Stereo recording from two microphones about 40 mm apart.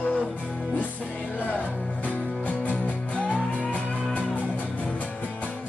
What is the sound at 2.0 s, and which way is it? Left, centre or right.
Music, left.